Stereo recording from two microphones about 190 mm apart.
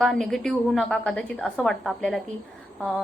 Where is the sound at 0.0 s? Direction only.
Centre (ahead or behind).